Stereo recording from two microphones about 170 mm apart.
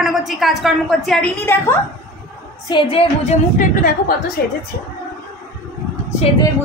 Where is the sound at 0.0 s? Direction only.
Centre (ahead or behind).